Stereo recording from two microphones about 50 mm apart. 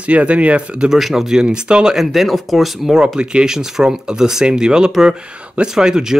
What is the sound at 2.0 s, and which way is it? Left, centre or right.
Speech, centre.